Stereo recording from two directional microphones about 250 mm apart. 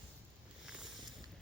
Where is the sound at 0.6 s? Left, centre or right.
Centre.